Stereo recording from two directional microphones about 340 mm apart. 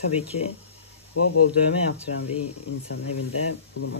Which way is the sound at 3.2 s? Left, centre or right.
Left.